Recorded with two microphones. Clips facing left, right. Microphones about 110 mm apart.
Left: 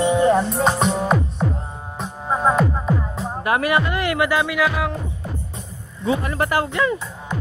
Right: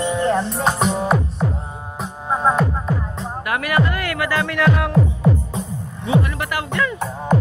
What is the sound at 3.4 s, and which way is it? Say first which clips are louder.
Music: left 1 dB; 25° left (ahead or behind).